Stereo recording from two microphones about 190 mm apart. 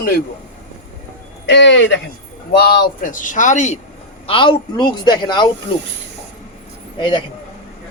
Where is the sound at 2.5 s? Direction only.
55° left (ahead or behind); by 3.8 s 40° left (ahead or behind).